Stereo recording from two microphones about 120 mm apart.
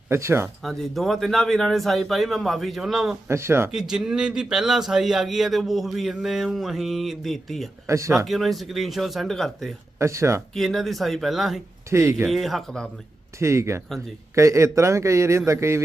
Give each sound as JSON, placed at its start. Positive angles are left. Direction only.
{"t": 0.1, "sound": "a man's voice", "side_deg": -20}
{"t": 0.4, "sound": "a man's voice", "side_deg": 0}
{"t": 3.2, "sound": "a man's voice", "side_deg": -20}
{"t": 3.7, "sound": "a man's voice", "side_deg": -5}
{"t": 7.9, "sound": "a man's voice", "side_deg": -25}
{"t": 8.3, "sound": "a man's voice", "side_deg": 0}
{"t": 10.0, "sound": "a man's voice", "side_deg": -25}
{"t": 10.5, "sound": "a man's voice", "side_deg": 5}
{"t": 11.9, "sound": "a man's voice", "side_deg": -25}
{"t": 12.3, "sound": "a man's voice", "side_deg": 0}
{"t": 13.4, "sound": "a man's voice", "side_deg": -25}